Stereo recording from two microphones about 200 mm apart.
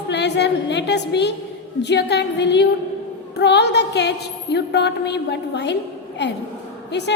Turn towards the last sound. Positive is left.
turn(degrees=60)  # may be behind; listen again after turning